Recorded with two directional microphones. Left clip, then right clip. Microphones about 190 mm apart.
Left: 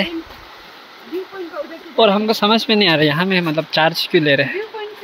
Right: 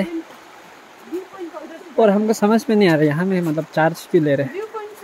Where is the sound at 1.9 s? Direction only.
25° right (ahead or behind).